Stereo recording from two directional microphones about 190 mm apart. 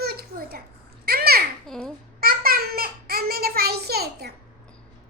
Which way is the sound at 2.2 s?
50° right (ahead or behind).